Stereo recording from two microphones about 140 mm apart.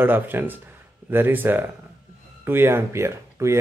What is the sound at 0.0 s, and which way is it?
Speech, 15° right (ahead or behind).